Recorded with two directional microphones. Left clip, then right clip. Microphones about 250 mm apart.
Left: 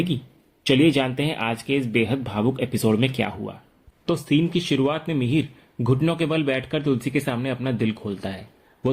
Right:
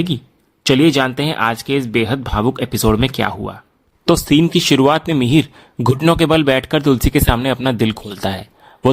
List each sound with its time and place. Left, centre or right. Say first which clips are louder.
0.6 s speech: right 6 dB; right